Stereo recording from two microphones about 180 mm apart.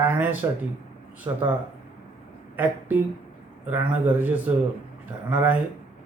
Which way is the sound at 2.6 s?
10° right (ahead or behind).